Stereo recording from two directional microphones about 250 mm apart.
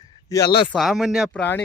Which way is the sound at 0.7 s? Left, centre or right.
Centre.